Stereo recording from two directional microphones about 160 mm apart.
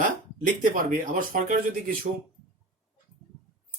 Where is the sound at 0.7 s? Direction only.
60° right (ahead or behind).